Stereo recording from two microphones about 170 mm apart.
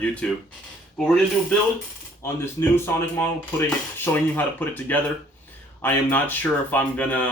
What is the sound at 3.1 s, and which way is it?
A man's voice, 10° left (ahead or behind).